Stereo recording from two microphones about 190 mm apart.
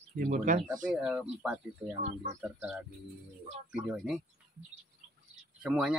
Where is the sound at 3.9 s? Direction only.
Centre (ahead or behind).